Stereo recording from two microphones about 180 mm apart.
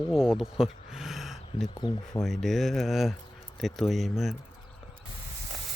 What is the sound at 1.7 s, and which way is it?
Speech, 25° left (ahead or behind).